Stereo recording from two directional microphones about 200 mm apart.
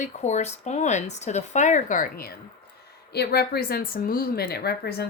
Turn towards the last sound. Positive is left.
turn(degrees=50)  # may be behind; listen again after turning